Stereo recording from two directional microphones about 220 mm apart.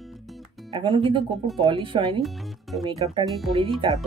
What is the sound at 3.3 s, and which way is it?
Speech, centre (ahead or behind).